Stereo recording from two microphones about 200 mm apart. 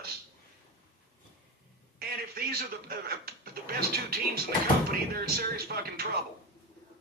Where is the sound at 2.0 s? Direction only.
50° right (ahead or behind).